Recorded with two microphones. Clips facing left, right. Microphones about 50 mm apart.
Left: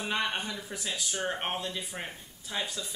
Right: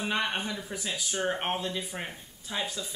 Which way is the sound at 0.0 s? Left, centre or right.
Centre.